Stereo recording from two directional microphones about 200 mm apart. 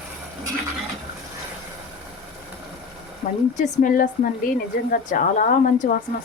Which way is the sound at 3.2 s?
30° left (ahead or behind).